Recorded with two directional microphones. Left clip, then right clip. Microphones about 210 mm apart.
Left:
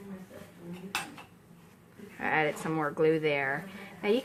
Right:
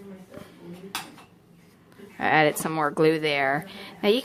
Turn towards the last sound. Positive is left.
turn(degrees=-50)  # may be behind; listen again after turning